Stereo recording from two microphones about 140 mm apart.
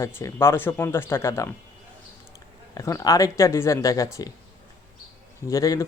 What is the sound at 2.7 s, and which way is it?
Speech, 25° left (ahead or behind).